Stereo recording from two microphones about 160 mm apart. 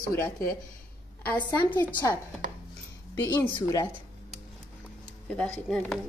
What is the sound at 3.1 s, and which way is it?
Speech, 20° left (ahead or behind).